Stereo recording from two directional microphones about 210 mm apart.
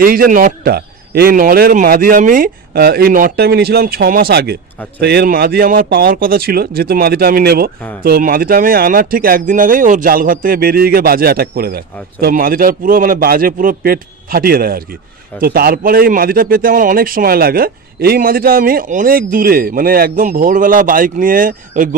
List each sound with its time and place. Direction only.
0.0 s speech: 45° right (ahead or behind)